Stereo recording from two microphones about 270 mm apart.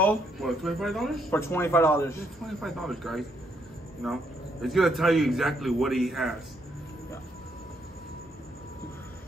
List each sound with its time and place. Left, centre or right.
0.0 s speech: centre